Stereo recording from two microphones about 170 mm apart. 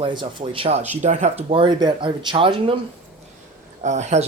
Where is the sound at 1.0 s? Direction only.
45° right (ahead or behind).